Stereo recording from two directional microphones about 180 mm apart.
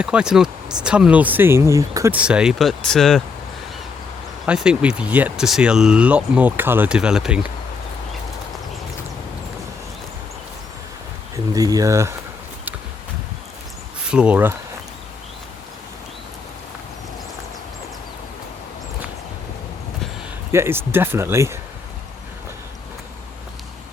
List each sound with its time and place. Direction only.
0.0 s speech: 5° right (ahead or behind)
2.1 s speech: 5° right (ahead or behind)
4.4 s speech: 5° right (ahead or behind)
11.5 s speech: 20° right (ahead or behind)
14.1 s speech: 5° right (ahead or behind)
20.5 s speech: 15° right (ahead or behind)